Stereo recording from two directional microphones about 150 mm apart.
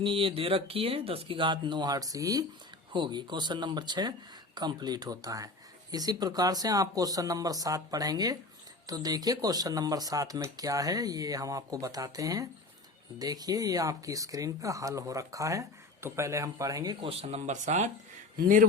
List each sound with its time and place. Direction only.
0.0 s speech: 35° right (ahead or behind)
17.1 s speech: 45° right (ahead or behind)
18.3 s speech: 65° right (ahead or behind)